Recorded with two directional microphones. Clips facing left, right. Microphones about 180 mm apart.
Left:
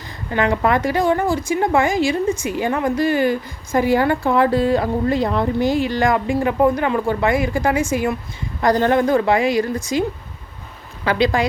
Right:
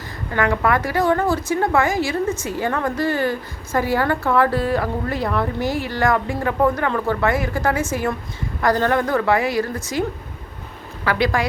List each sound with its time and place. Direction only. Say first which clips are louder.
0.3 s a woman's voice: left 2 dB; 20° left (ahead or behind)
11.0 s a woman's voice: left 2 dB; 20° left (ahead or behind)